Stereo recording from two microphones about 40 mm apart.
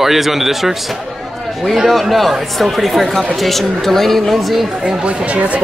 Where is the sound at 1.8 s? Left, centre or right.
Centre.